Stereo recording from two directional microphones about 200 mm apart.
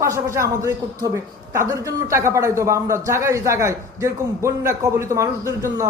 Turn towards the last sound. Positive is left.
turn(degrees=-15)  # may be behind; listen again after turning